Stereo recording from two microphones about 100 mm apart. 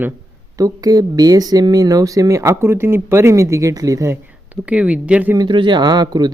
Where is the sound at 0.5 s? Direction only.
35° right (ahead or behind).